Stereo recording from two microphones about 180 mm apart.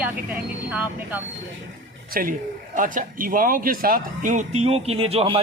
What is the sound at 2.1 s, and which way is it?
A woman's voice, 55° right (ahead or behind).